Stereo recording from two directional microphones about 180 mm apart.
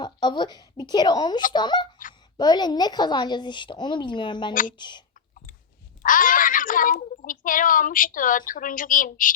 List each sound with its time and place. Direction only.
0.0 s speech: 25° left (ahead or behind)
6.0 s speech: 50° left (ahead or behind)